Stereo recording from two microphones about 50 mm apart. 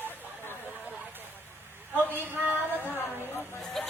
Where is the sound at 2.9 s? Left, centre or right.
Left.